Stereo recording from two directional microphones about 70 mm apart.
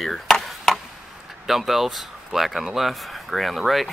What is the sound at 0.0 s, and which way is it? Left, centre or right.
Chop, centre.